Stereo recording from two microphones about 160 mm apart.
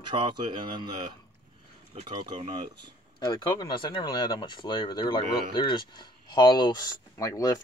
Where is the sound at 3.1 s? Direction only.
25° left (ahead or behind).